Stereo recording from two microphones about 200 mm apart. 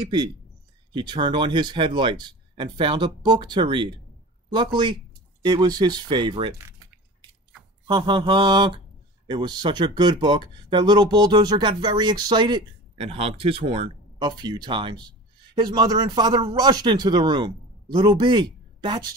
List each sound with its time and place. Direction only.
0.9 s speech: 25° right (ahead or behind)
5.4 s speech: 20° right (ahead or behind)
7.8 s speech: 25° right (ahead or behind)